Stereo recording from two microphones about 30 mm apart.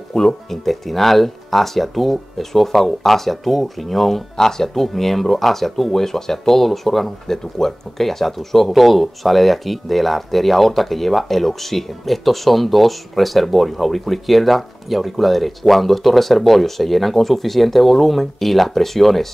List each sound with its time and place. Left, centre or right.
0.1 s speech: left
0.5 s speech: centre